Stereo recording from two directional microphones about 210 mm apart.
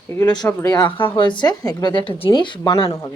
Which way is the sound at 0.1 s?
15° left (ahead or behind).